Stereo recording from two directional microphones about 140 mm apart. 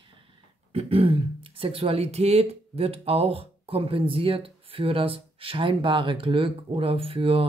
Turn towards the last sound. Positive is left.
turn(degrees=-40)  # may be behind; listen again after turning